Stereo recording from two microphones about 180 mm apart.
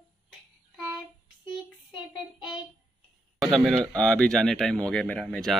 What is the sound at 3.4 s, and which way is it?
Speech, centre (ahead or behind).